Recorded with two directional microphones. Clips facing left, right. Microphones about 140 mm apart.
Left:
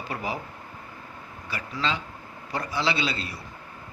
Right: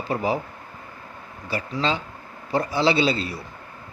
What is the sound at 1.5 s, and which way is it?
Speech, 30° right (ahead or behind).